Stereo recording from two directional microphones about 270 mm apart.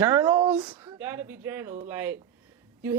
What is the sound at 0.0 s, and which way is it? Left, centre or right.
Speech, centre.